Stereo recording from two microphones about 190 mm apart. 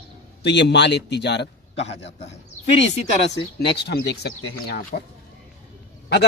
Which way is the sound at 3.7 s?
60° left (ahead or behind).